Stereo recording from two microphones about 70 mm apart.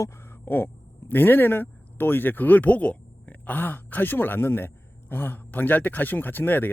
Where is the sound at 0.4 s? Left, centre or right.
Left.